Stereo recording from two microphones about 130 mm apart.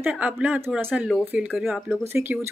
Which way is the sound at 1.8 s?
15° right (ahead or behind).